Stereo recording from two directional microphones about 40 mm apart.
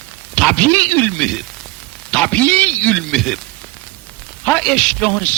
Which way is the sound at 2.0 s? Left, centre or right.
Left.